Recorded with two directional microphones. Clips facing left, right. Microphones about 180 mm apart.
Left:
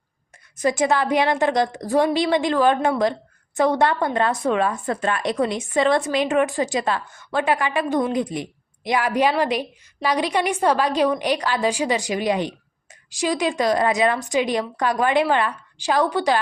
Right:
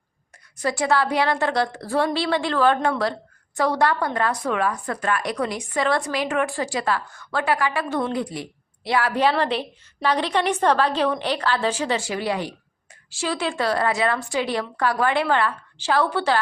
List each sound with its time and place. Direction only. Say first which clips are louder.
0.5 s a woman's voice: left 2 dB; 20° left (ahead or behind)